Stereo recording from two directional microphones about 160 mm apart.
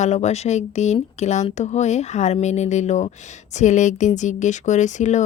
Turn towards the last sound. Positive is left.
turn(degrees=50)  # may be behind; listen again after turning